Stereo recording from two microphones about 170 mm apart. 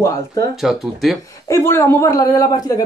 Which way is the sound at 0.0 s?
20° left (ahead or behind).